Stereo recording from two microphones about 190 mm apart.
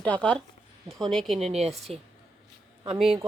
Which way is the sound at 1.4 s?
35° right (ahead or behind).